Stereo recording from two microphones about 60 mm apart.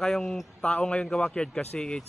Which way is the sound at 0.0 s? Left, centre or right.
Centre.